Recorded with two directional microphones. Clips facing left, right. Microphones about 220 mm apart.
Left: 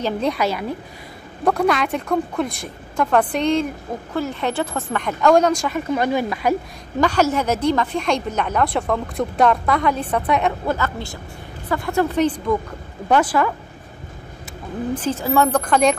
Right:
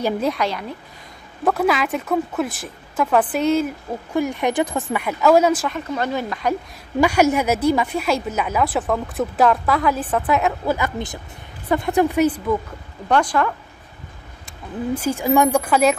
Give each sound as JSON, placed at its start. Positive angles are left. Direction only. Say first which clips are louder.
{"t": 0.0, "sound": "a woman's voice", "louder": "even", "side_deg": 0}
{"t": 5.7, "sound": "speech", "louder": "left 4 dB", "side_deg": 10}
{"t": 7.0, "sound": "a woman's voice", "louder": "right 2 dB", "side_deg": -10}
{"t": 10.8, "sound": "a woman's voice", "louder": "right 1 dB", "side_deg": -20}
{"t": 13.1, "sound": "a woman's voice", "louder": "left 1 dB", "side_deg": 5}
{"t": 15.0, "sound": "a woman's voice", "louder": "right 2 dB", "side_deg": -10}